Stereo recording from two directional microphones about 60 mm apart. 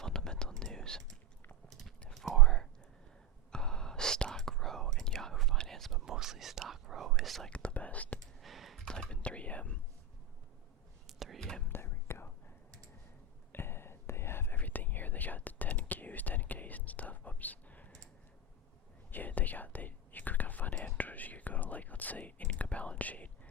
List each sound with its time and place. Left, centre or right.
0.0 s whispering: centre
2.0 s whispering: centre
6.1 s whispering: centre
7.5 s whispering: left
8.4 s computer keyboard: centre
8.8 s whispering: centre
11.0 s whispering: centre
11.3 s whispering: centre
11.7 s whispering: left
13.5 s whispering: left
19.1 s whispering: left